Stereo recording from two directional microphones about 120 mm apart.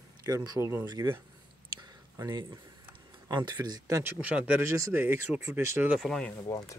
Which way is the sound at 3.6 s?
30° right (ahead or behind).